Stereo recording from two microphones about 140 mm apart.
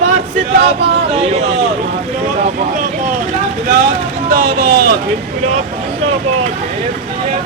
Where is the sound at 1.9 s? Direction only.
55° right (ahead or behind).